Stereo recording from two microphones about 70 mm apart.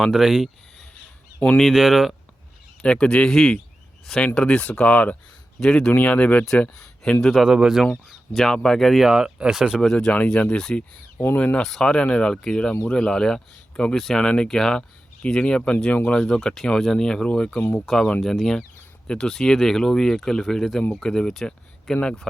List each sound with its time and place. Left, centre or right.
0.0 s speech: centre
1.7 s speech: centre
2.8 s speech: centre
5.5 s speech: centre
5.9 s speech: left; by 9.8 s centre
9.8 s speech: centre
10.1 s speech: centre
11.6 s speech: centre
13.9 s speech: centre
14.2 s speech: centre